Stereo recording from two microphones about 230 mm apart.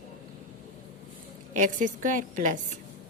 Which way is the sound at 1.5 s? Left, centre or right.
Right.